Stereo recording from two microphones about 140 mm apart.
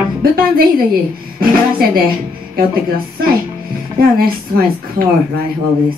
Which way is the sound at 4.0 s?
90° right.